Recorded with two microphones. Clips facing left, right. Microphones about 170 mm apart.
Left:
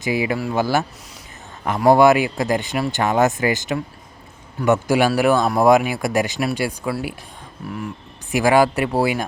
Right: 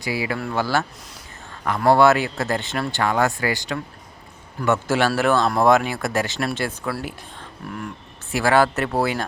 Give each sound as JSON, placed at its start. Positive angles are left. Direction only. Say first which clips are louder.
{"t": 0.0, "sound": "speech", "louder": "left 4 dB", "side_deg": 20}
{"t": 8.3, "sound": "speech", "louder": "left 3 dB", "side_deg": 15}